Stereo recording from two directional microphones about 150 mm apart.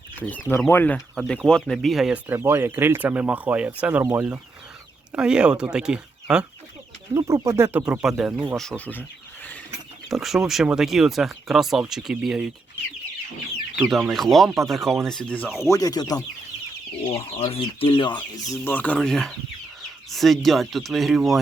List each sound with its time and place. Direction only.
0.2 s speech: 10° left (ahead or behind)
0.9 s speech: centre (ahead or behind)
7.1 s speech: 20° right (ahead or behind)
8.8 s speech: 10° left (ahead or behind)
10.1 s speech: centre (ahead or behind)
13.7 s speech: 5° right (ahead or behind)
15.5 s speech: 20° left (ahead or behind)
17.1 s speech: 40° left (ahead or behind)
18.5 s speech: 15° left (ahead or behind); by 21.3 s centre (ahead or behind)